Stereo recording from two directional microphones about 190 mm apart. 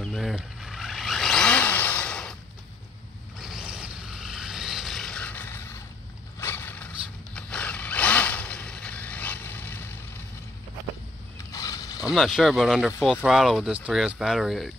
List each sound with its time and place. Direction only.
0.0 s vehicle: centre (ahead or behind)
3.3 s vehicle: centre (ahead or behind)
6.4 s a sound: 10° left (ahead or behind)
7.3 s zipper: 5° left (ahead or behind)
11.5 s a sound: 20° left (ahead or behind)
12.1 s speech: centre (ahead or behind)